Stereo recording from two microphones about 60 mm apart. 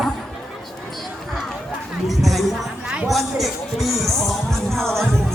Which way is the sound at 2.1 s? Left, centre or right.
Centre.